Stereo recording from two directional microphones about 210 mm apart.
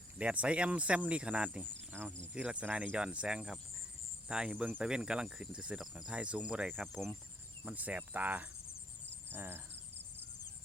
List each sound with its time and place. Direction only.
0.2 s speech: 5° right (ahead or behind)
7.6 s cricket: 5° right (ahead or behind)